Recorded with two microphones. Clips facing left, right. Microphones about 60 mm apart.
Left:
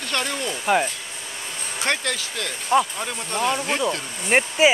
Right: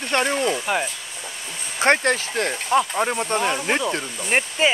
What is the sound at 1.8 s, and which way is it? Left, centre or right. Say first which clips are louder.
Speech: right 7 dB; right.